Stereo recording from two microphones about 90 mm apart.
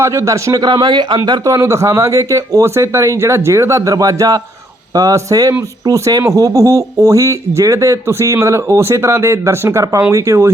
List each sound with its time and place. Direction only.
0.0 s speech: 30° right (ahead or behind)
0.6 s speech: 55° right (ahead or behind); by 10.5 s 35° right (ahead or behind)